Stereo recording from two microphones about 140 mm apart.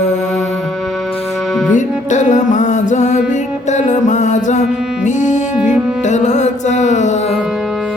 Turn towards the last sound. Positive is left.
turn(degrees=55)  # may be behind; listen again after turning